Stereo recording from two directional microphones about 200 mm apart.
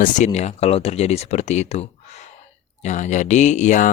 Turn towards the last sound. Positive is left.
turn(degrees=40)  # may be behind; listen again after turning